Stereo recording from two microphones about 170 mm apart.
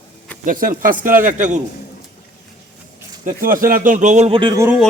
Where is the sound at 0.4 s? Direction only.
55° right (ahead or behind).